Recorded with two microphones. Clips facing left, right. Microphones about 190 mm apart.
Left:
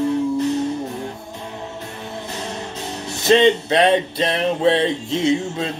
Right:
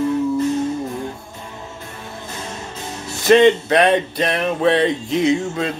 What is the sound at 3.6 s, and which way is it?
Music, 25° left (ahead or behind).